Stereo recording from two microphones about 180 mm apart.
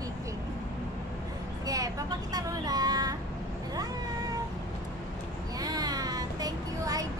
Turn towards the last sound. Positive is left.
turn(degrees=-20)  # may be behind; listen again after turning